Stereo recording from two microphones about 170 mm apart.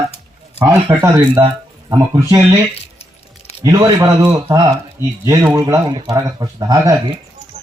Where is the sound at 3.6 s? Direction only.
20° right (ahead or behind).